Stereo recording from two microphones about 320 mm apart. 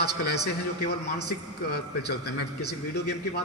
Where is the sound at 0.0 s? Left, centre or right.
Left.